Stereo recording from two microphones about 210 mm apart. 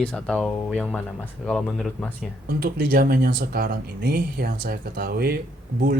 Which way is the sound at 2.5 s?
45° right (ahead or behind).